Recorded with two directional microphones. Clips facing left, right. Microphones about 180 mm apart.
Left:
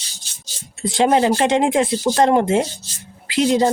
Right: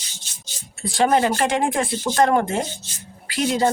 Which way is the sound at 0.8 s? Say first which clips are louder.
Left 2 dB; 25° left (ahead or behind).